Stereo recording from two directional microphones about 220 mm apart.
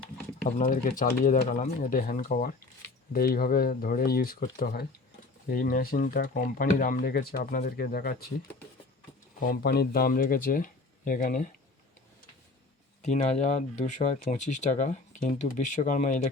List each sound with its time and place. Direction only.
0.4 s speech: 40° left (ahead or behind)
9.5 s speech: 45° left (ahead or behind)
13.0 s speech: 35° left (ahead or behind)